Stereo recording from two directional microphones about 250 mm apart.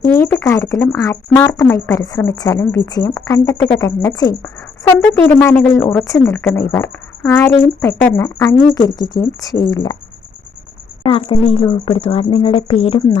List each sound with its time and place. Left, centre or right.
0.0 s speech: centre
5.8 s speech: centre
6.1 s speech: centre
11.0 s a woman's voice: left